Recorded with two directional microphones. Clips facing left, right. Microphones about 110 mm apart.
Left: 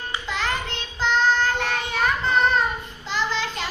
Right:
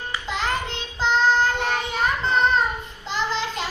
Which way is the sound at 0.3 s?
20° right (ahead or behind).